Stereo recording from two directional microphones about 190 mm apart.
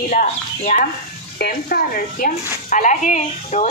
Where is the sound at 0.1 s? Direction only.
45° left (ahead or behind).